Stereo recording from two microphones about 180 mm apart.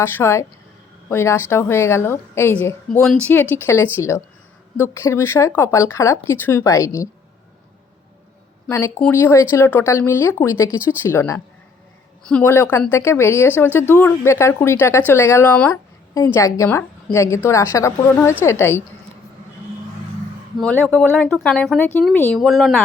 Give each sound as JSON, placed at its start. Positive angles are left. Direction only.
{"t": 0.0, "sound": "speech", "side_deg": 15}
{"t": 8.6, "sound": "speech", "side_deg": 10}
{"t": 20.6, "sound": "speech", "side_deg": 5}